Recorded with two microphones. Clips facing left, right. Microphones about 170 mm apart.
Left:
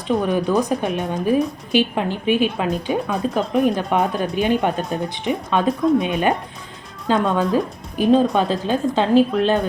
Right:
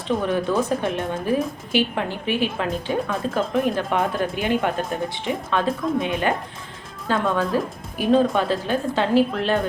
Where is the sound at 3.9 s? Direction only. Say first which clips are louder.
Left 3 dB; 20° left (ahead or behind).